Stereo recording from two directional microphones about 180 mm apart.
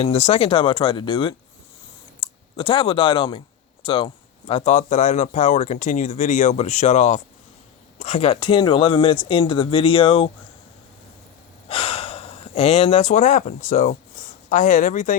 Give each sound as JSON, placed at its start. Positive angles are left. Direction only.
{"t": 0.0, "sound": "speech", "side_deg": 35}
{"t": 11.7, "sound": "speech", "side_deg": 30}